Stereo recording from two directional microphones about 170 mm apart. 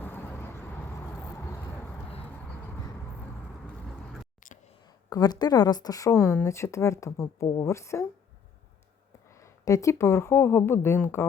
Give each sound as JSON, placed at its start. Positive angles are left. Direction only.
{"t": 0.0, "sound": "vehicle", "side_deg": 10}
{"t": 4.4, "sound": "a sound", "side_deg": 50}
{"t": 5.0, "sound": "speech", "side_deg": 20}
{"t": 9.3, "sound": "speech", "side_deg": 20}